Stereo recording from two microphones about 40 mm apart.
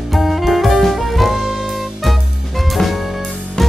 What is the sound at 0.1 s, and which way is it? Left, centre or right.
Saxophone, centre.